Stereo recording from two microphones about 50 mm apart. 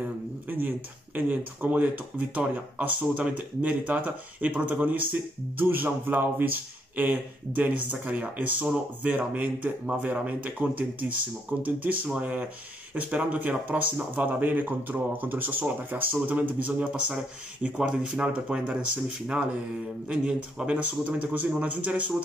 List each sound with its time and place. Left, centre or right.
0.5 s speech: right